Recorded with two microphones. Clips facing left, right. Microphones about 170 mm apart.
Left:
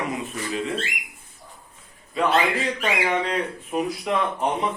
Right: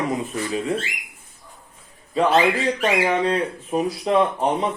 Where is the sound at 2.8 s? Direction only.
30° right (ahead or behind).